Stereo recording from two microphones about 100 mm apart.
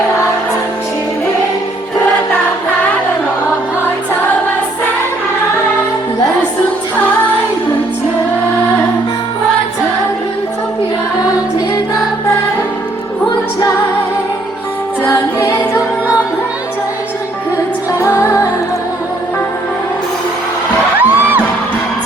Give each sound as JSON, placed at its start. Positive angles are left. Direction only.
{"t": 15.0, "sound": "music", "side_deg": 25}
{"t": 18.0, "sound": "music", "side_deg": 30}
{"t": 21.0, "sound": "music", "side_deg": -20}